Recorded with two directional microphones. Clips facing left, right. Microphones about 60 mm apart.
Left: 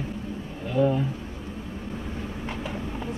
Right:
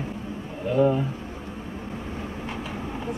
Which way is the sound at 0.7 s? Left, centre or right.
Centre.